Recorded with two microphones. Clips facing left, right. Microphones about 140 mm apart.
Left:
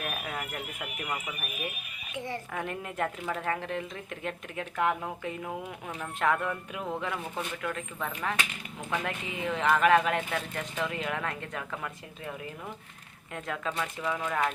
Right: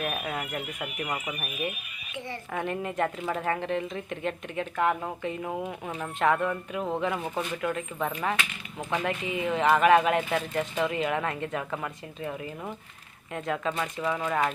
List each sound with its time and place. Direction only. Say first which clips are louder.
0.0 s a woman's voice: right 4 dB; centre (ahead or behind)
2.1 s speech: left 1 dB; 45° left (ahead or behind)
2.5 s a woman's voice: right 4 dB; centre (ahead or behind)
8.9 s a woman's voice: right 4 dB; 5° right (ahead or behind)